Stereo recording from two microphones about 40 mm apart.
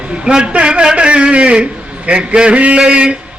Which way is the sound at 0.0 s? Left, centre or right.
Right.